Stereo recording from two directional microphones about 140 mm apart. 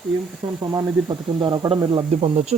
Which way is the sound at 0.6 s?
25° right (ahead or behind).